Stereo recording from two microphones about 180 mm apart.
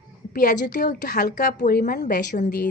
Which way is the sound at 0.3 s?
55° left (ahead or behind).